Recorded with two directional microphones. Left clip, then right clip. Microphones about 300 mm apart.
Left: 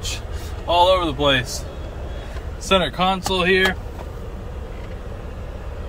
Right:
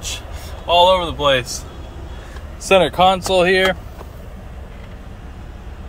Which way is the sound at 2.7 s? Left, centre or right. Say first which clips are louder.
Right 6 dB; centre.